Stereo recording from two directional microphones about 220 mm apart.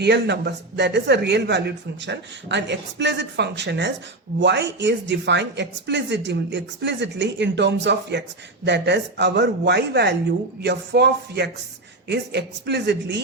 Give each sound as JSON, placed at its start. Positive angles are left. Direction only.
{"t": 0.0, "sound": "a man's voice", "side_deg": -50}